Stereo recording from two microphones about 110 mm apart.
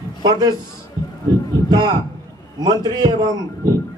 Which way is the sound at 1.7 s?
35° right (ahead or behind).